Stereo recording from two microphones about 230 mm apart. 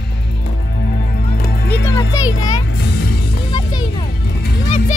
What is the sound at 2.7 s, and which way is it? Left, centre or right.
Music, left.